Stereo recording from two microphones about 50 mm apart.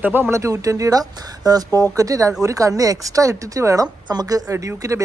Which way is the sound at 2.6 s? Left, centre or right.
Right.